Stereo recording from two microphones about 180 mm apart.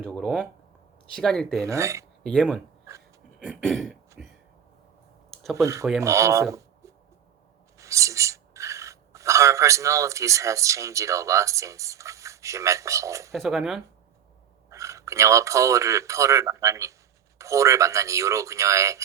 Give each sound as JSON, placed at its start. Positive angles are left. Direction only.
{"t": 0.0, "sound": "speech", "side_deg": 5}
{"t": 1.6, "sound": "speech", "side_deg": -15}
{"t": 2.2, "sound": "speech", "side_deg": 5}
{"t": 5.3, "sound": "a sound", "side_deg": 0}
{"t": 5.5, "sound": "speech", "side_deg": -15}
{"t": 13.3, "sound": "speech", "side_deg": 0}
{"t": 14.7, "sound": "speech", "side_deg": -15}